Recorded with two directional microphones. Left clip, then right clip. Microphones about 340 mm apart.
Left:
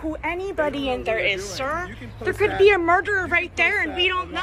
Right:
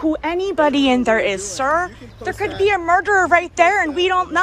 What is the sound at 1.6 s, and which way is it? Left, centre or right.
Speech, centre.